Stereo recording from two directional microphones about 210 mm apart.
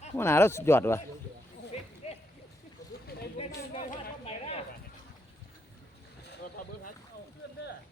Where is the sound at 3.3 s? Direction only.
30° left (ahead or behind).